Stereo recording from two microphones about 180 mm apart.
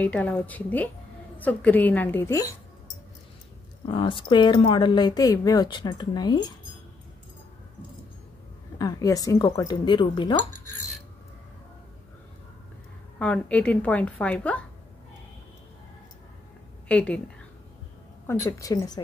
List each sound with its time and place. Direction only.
0.0 s a woman's voice: 10° left (ahead or behind)
3.8 s speech: 25° left (ahead or behind)
8.7 s speech: 20° left (ahead or behind)
13.2 s a woman's voice: 5° left (ahead or behind)
16.8 s a woman's voice: 5° left (ahead or behind)
18.2 s speech: 15° left (ahead or behind)